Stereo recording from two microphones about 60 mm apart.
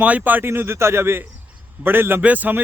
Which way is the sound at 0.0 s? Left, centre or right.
Right.